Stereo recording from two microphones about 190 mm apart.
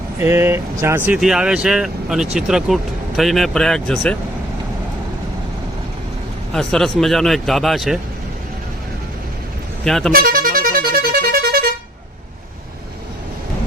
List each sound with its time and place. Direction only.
0.2 s speech: 15° right (ahead or behind); by 4.2 s 5° left (ahead or behind)
6.5 s speech: 5° left (ahead or behind)
9.8 s speech: centre (ahead or behind)
10.1 s vehicle horn: 50° right (ahead or behind)